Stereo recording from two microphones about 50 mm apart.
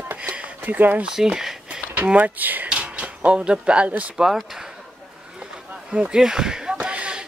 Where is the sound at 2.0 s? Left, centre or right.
Right.